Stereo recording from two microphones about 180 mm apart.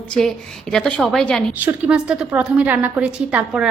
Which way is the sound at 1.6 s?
10° right (ahead or behind).